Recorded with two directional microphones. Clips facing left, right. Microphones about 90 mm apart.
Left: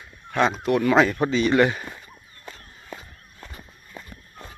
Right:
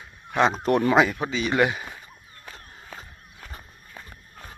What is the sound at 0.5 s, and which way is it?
Speech, 35° right (ahead or behind).